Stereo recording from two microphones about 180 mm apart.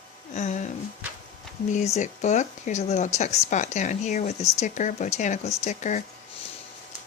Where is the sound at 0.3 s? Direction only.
40° left (ahead or behind).